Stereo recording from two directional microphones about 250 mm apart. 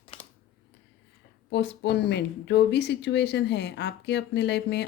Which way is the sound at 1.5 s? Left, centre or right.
Left.